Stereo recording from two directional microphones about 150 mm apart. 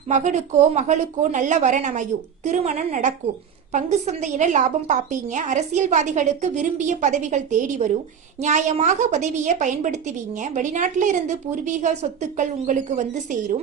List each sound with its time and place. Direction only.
0.1 s a woman's voice: 50° right (ahead or behind)